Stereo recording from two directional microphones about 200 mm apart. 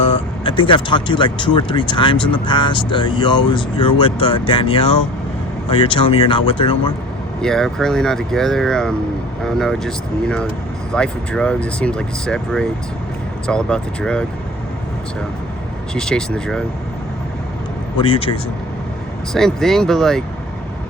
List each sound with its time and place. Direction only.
0.4 s speech: 25° left (ahead or behind)
7.4 s speech: centre (ahead or behind)
16.0 s speech: 5° left (ahead or behind)
18.0 s speech: 25° left (ahead or behind)
19.3 s speech: centre (ahead or behind)